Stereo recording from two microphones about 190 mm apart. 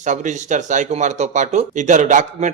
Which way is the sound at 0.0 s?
40° right (ahead or behind).